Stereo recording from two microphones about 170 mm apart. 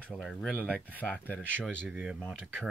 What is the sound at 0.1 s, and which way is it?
Speech, centre (ahead or behind).